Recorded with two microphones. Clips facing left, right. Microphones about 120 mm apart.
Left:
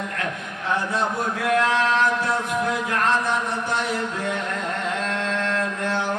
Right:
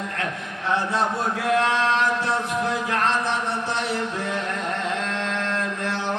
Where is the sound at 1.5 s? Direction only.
30° right (ahead or behind).